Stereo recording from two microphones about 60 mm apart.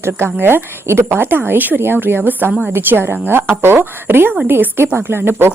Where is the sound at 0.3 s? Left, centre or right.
Right.